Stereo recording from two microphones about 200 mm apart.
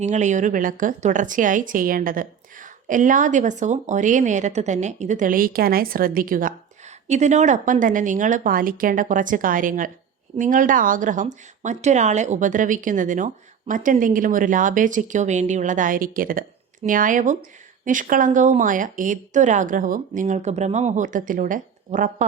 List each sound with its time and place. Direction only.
0.0 s a woman's voice: 35° right (ahead or behind)